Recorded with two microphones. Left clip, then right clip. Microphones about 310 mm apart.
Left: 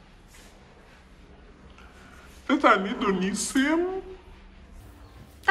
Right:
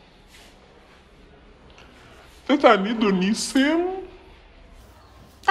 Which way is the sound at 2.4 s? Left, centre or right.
Centre.